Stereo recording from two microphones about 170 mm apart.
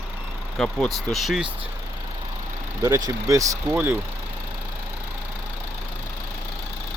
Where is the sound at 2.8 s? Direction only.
20° right (ahead or behind).